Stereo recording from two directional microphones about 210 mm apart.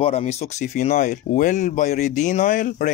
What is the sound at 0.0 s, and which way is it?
Speech, 30° left (ahead or behind).